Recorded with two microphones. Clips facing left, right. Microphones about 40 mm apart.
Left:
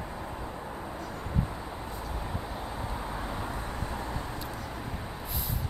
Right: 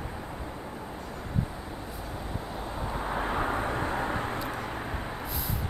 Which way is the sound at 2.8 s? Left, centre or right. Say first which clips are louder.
Right 3 dB; right.